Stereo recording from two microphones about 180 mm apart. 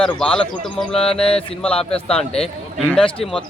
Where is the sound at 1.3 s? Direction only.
30° left (ahead or behind).